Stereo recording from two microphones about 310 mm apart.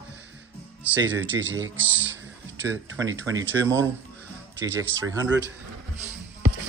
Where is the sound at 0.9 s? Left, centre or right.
Right.